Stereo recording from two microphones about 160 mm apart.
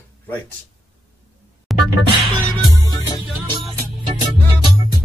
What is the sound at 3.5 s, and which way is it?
Music, 30° right (ahead or behind).